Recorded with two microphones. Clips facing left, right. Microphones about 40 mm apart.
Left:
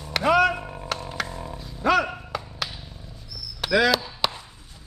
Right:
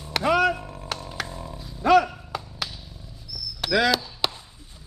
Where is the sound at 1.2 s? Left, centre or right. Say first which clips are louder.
Left 2 dB; centre.